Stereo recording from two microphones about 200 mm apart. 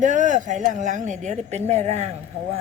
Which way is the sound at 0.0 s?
40° right (ahead or behind).